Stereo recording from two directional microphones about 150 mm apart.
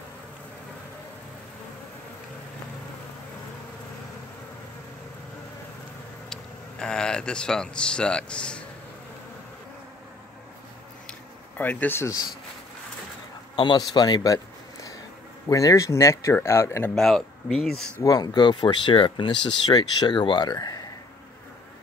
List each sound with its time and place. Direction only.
6.3 s speech: 5° left (ahead or behind)
11.5 s speech: 10° left (ahead or behind)
13.6 s speech: 30° left (ahead or behind)
16.9 s speech: 5° left (ahead or behind)
18.0 s speech: 25° left (ahead or behind)